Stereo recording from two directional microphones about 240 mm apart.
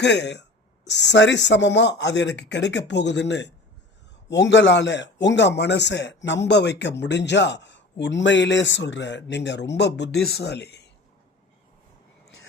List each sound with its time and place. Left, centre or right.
0.0 s a man's voice: left